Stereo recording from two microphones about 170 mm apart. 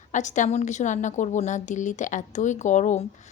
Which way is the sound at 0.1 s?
45° left (ahead or behind).